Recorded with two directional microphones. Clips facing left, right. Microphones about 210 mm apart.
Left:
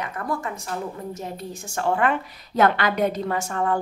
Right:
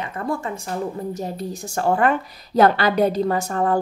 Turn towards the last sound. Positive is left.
turn(degrees=-35)  # may be behind; listen again after turning